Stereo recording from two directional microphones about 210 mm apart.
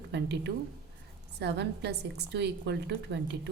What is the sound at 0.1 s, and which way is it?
A woman's voice, 55° right (ahead or behind).